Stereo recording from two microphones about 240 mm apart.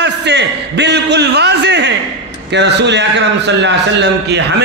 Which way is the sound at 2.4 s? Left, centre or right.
Right.